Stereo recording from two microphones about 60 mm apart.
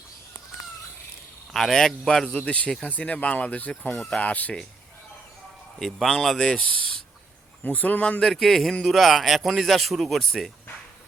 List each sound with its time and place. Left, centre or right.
1.5 s speech: centre
2.8 s speech: left
5.8 s speech: centre
7.6 s speech: left
8.2 s speech: centre